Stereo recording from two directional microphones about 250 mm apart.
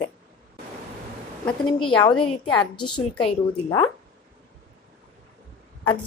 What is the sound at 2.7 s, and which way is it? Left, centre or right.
A woman's voice, centre.